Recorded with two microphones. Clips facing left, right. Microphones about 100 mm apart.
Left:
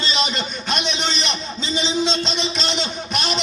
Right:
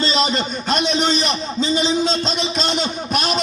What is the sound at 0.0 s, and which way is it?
A man's voice, 35° right (ahead or behind).